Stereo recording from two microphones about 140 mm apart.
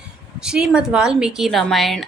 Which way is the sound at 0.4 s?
5° right (ahead or behind).